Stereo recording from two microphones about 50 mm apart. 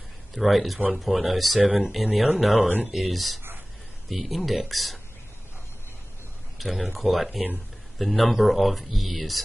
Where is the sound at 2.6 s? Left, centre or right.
Right.